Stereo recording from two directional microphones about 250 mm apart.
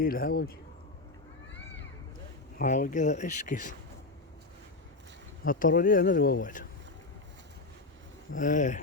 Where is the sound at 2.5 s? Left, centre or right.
Left.